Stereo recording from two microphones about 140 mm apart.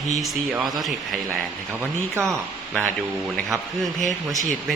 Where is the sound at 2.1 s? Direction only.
20° right (ahead or behind).